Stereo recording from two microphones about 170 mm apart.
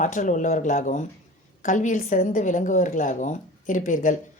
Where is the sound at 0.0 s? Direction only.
50° left (ahead or behind).